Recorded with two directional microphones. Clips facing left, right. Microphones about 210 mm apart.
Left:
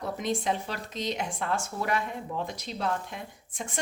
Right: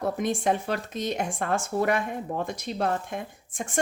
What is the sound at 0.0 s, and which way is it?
Speech, 50° right (ahead or behind).